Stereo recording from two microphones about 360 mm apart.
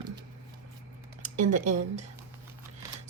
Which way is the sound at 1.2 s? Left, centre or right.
Centre.